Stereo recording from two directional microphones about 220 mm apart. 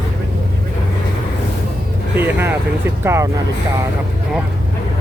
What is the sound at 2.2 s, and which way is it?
Vehicle, 10° right (ahead or behind).